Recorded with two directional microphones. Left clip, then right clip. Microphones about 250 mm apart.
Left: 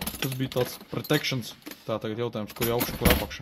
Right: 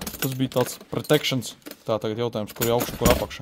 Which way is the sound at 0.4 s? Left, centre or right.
Right.